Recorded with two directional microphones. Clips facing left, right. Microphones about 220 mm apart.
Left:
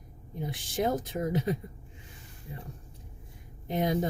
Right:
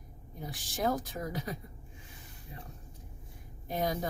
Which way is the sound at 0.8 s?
25° left (ahead or behind).